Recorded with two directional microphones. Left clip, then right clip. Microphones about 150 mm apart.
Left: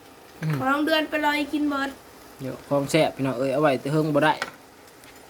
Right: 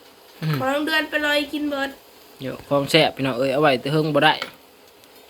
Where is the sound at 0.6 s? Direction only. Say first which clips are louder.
Right 1 dB; 75° left (ahead or behind).